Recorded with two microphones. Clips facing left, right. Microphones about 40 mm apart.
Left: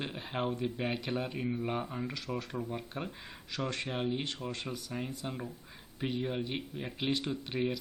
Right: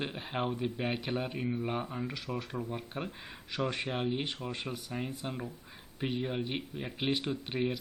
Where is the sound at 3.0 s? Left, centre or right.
Centre.